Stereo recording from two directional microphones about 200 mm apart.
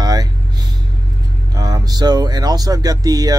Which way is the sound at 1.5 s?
20° right (ahead or behind).